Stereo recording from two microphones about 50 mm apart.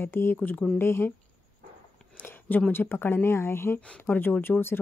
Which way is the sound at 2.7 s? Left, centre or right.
Left.